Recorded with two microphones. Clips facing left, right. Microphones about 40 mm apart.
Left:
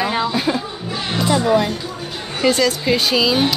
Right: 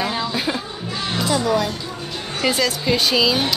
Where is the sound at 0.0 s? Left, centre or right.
Left.